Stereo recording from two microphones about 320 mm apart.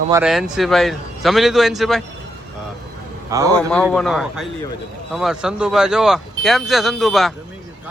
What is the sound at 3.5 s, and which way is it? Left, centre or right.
A man's voice, centre.